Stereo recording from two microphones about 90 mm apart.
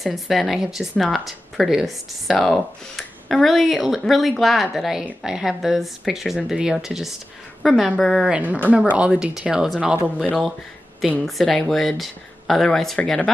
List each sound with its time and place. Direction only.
0.0 s speech: centre (ahead or behind)
8.3 s speech: 15° right (ahead or behind)
11.2 s speech: 5° left (ahead or behind)